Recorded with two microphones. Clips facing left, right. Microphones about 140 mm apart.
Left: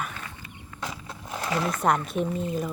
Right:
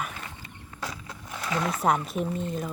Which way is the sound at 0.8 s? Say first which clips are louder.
Left 1 dB; 25° left (ahead or behind).